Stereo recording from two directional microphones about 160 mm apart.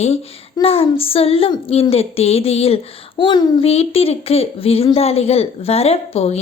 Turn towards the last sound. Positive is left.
turn(degrees=40)  # may be behind; listen again after turning